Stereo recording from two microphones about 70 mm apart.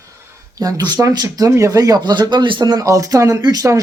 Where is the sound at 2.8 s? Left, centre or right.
Right.